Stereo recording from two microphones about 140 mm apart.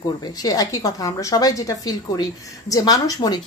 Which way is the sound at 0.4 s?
25° left (ahead or behind).